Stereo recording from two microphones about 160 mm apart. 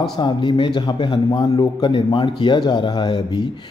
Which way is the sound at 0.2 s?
30° left (ahead or behind).